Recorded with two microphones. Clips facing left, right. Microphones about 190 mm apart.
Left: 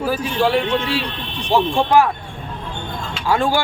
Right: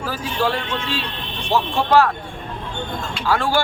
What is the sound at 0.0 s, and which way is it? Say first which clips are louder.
A man's voice: left 4 dB; 10° left (ahead or behind).